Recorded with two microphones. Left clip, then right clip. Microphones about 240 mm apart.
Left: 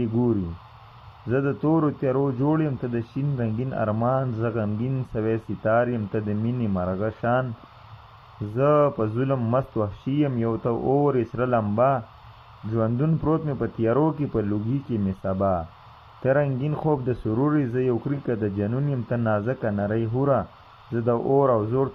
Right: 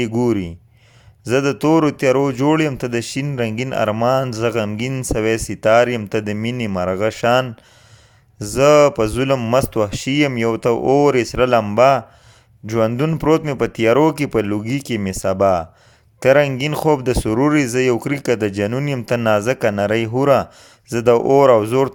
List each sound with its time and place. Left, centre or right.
0.0 s speech: right
8.5 s speech: right